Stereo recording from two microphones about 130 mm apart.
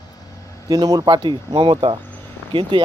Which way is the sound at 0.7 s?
30° right (ahead or behind).